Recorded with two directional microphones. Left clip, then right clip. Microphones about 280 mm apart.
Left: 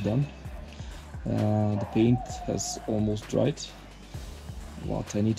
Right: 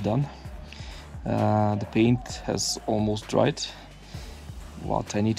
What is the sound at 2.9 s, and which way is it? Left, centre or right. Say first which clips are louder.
Speech: right 3 dB; centre.